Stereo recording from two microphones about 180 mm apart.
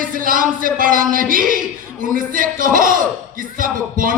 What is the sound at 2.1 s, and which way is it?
A man's voice, 50° right (ahead or behind).